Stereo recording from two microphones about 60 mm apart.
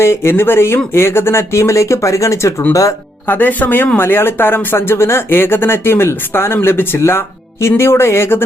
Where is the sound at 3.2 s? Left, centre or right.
Left.